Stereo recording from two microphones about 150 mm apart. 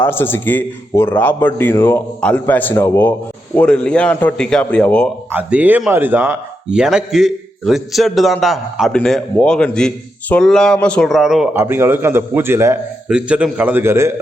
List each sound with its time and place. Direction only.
0.0 s a man's voice: 15° left (ahead or behind)
5.3 s a man's voice: 10° right (ahead or behind)
11.5 s a man's voice: 15° right (ahead or behind)
13.1 s a man's voice: 5° right (ahead or behind)